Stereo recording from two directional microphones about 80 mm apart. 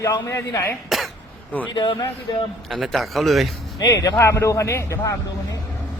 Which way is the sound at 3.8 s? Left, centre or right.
Left.